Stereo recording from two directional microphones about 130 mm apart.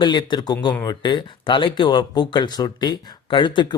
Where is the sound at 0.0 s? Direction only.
35° left (ahead or behind).